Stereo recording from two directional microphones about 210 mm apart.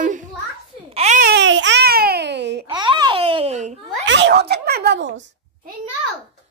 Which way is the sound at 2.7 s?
20° right (ahead or behind).